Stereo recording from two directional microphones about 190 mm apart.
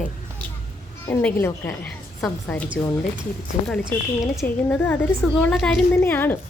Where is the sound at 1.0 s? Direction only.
10° left (ahead or behind).